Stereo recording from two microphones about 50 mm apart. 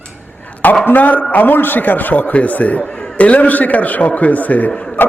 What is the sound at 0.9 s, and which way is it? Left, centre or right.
A man's voice, left.